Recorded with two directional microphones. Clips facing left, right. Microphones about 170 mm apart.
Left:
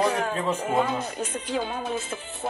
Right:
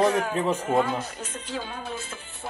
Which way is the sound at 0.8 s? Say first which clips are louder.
Even; 20° left (ahead or behind).